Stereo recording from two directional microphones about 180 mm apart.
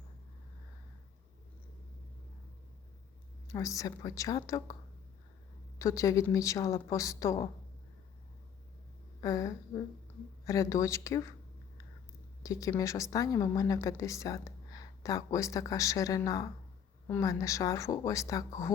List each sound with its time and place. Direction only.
3.4 s a woman's voice: 20° left (ahead or behind)
5.8 s a woman's voice: 20° left (ahead or behind)
9.2 s a woman's voice: 20° left (ahead or behind)
12.4 s a woman's voice: 20° left (ahead or behind)